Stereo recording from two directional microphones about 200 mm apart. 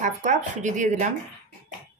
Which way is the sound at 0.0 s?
35° right (ahead or behind).